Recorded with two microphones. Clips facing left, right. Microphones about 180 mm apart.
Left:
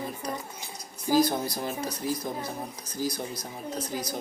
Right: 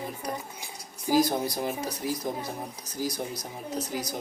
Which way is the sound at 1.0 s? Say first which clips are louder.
Even; 15° right (ahead or behind).